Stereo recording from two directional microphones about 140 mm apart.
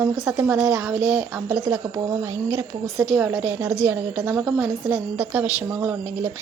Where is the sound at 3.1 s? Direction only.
10° right (ahead or behind).